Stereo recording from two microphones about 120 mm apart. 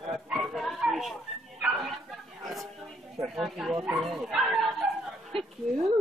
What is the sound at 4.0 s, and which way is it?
Bow-wow, centre (ahead or behind).